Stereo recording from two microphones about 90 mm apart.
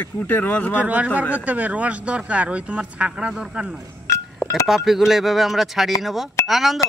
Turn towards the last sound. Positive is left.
turn(degrees=0)  # may be behind; listen again after turning